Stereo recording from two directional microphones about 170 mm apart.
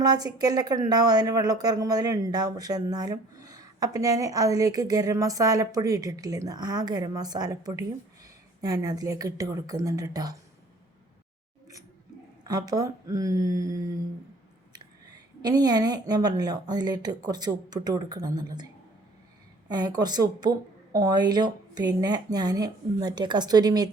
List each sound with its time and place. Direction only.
0.0 s a woman's voice: 25° right (ahead or behind)
12.5 s a woman's voice: 20° right (ahead or behind)
15.4 s a woman's voice: 25° right (ahead or behind)